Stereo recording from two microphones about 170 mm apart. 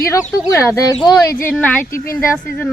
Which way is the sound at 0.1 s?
15° left (ahead or behind).